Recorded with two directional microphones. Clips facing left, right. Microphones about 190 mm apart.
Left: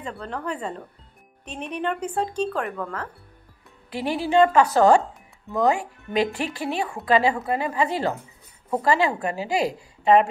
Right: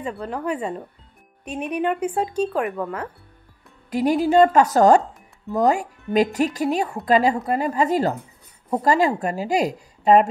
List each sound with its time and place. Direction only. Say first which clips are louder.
0.0 s speech: right 4 dB; 10° right (ahead or behind)
3.9 s a woman's voice: right 4 dB; 45° right (ahead or behind)